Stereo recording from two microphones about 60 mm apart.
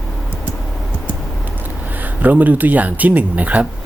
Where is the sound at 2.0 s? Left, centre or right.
Right.